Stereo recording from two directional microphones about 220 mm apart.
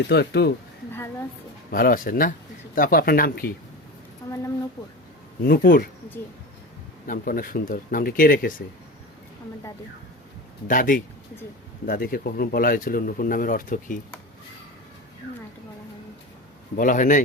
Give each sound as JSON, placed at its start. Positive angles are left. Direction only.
{"t": 0.1, "sound": "speech", "side_deg": 50}
{"t": 1.7, "sound": "speech", "side_deg": 40}
{"t": 5.4, "sound": "speech", "side_deg": 40}
{"t": 7.1, "sound": "speech", "side_deg": 40}
{"t": 10.7, "sound": "speech", "side_deg": 40}
{"t": 16.7, "sound": "speech", "side_deg": 35}